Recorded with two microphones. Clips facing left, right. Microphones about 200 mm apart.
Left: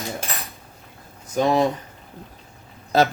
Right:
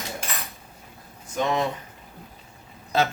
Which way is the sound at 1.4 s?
35° left (ahead or behind).